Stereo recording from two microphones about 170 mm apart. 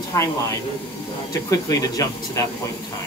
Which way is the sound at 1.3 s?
20° left (ahead or behind).